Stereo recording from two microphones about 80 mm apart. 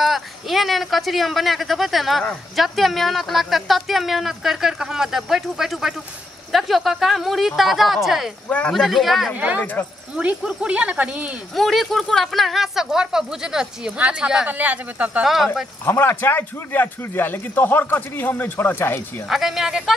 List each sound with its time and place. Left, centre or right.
0.0 s speech: centre
8.5 s speech: centre
8.7 s speech: centre
9.3 s speech: centre
11.5 s speech: centre
15.2 s speech: centre
15.8 s speech: left
19.2 s speech: centre